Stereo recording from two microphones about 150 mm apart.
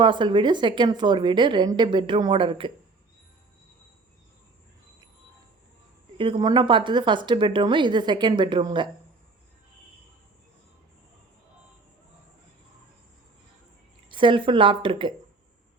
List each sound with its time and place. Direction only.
0.0 s a woman's voice: 30° right (ahead or behind)
6.1 s a woman's voice: 35° right (ahead or behind)
14.1 s a woman's voice: 35° right (ahead or behind)